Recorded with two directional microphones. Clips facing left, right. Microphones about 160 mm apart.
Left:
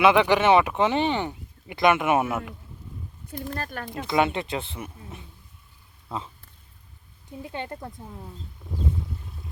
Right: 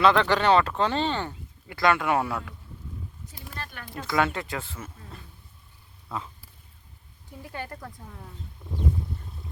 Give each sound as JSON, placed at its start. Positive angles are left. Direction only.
{"t": 0.0, "sound": "speech", "side_deg": 15}
{"t": 3.2, "sound": "speech", "side_deg": 55}
{"t": 3.8, "sound": "speech", "side_deg": 20}
{"t": 7.3, "sound": "speech", "side_deg": 20}